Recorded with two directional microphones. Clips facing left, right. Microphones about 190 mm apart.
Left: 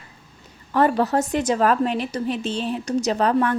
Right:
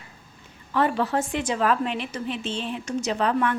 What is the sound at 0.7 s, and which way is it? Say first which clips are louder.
A woman's voice: left 4 dB; 45° left (ahead or behind).